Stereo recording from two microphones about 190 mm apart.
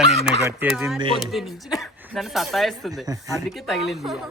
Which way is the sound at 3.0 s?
15° right (ahead or behind).